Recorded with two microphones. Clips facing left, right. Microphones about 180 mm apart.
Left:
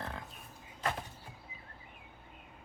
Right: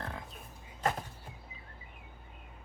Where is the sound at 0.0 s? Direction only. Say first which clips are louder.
Right 1 dB; centre (ahead or behind).